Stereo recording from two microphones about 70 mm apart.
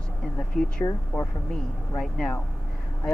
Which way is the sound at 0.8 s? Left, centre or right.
Left.